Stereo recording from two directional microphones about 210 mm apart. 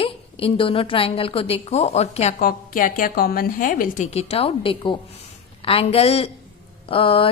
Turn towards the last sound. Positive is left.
turn(degrees=25)  # may be behind; listen again after turning